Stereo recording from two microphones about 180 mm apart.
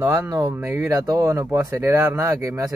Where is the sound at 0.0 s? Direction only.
15° right (ahead or behind).